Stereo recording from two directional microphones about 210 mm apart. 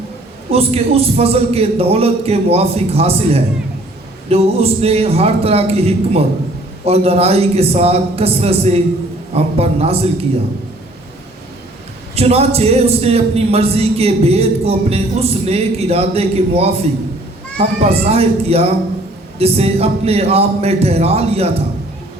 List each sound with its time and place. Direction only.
0.5 s speech: 30° right (ahead or behind)
12.1 s speech: 30° right (ahead or behind)